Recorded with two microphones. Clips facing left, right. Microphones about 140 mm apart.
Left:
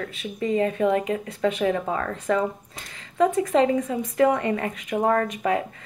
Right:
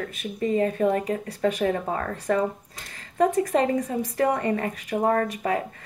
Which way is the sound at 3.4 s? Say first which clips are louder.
Left 2 dB; 40° right (ahead or behind).